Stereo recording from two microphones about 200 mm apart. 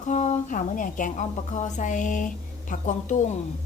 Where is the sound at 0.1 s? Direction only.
35° left (ahead or behind).